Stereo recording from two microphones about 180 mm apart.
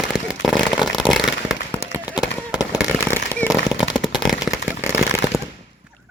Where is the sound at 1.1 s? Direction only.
Centre (ahead or behind).